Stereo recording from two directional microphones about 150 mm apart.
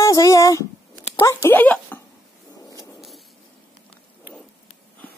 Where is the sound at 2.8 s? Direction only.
Centre (ahead or behind).